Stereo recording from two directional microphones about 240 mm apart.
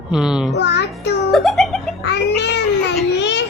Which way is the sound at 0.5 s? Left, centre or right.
Left.